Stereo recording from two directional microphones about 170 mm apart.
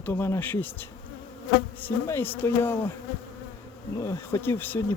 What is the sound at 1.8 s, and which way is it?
Speech, 10° left (ahead or behind).